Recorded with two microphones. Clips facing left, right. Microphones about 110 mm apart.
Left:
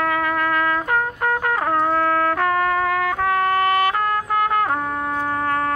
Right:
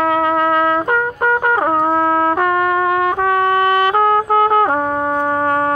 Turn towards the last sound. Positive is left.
turn(degrees=-25)  # may be behind; listen again after turning